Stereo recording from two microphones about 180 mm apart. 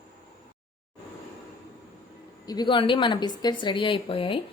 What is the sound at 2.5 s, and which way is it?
Speech, 25° left (ahead or behind).